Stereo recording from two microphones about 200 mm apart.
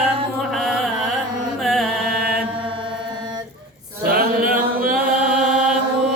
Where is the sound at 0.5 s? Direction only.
Centre (ahead or behind).